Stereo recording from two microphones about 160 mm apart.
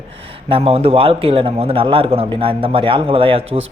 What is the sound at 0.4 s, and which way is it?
A man's voice, 35° right (ahead or behind).